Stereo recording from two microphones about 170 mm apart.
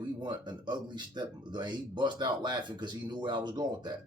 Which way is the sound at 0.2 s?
25° right (ahead or behind).